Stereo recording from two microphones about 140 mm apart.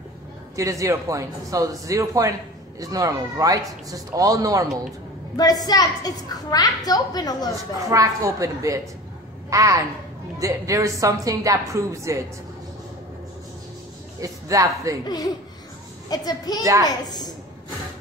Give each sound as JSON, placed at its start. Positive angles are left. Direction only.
{"t": 0.6, "sound": "speech", "side_deg": -20}
{"t": 5.3, "sound": "a woman's voice", "side_deg": 30}
{"t": 7.9, "sound": "speech", "side_deg": -25}
{"t": 14.2, "sound": "speech", "side_deg": -25}
{"t": 15.0, "sound": "a woman's voice", "side_deg": 25}